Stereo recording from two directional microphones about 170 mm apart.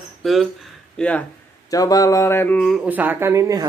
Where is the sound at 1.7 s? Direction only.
20° left (ahead or behind).